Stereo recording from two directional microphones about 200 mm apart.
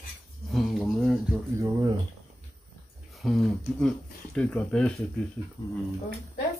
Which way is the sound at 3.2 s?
Centre (ahead or behind).